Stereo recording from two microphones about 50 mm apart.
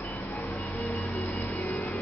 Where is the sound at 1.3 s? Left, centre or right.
Left.